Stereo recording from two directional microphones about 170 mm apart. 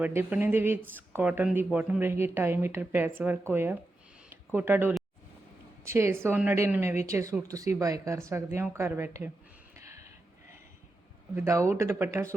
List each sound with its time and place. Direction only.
0.0 s speech: 10° right (ahead or behind)
9.7 s a sound: 15° right (ahead or behind)
11.3 s speech: 20° right (ahead or behind)